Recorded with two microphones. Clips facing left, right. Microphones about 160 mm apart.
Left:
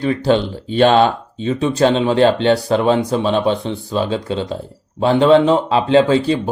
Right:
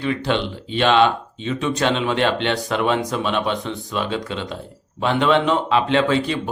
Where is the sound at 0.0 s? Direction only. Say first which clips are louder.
Left 6 dB; 35° left (ahead or behind).